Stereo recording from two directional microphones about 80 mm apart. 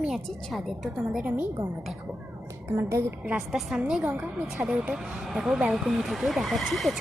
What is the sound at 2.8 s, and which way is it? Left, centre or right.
Speech, right.